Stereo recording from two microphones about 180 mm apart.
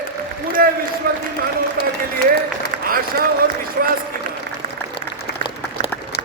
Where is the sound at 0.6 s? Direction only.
55° right (ahead or behind).